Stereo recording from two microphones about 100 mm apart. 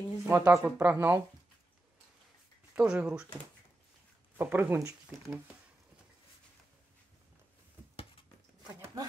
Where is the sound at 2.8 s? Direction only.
10° right (ahead or behind).